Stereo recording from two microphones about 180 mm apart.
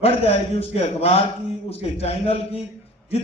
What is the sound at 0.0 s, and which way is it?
A man's voice, 35° left (ahead or behind).